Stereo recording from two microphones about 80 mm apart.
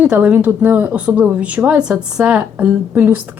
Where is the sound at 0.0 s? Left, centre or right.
Centre.